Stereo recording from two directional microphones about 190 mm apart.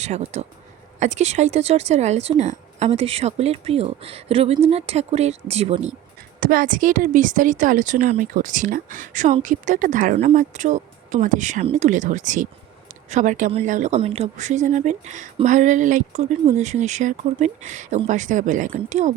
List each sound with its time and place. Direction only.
0.0 s speech: 35° right (ahead or behind)
6.4 s speech: 45° right (ahead or behind)